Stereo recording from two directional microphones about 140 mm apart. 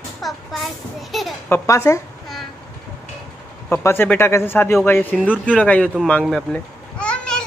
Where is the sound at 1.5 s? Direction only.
20° left (ahead or behind).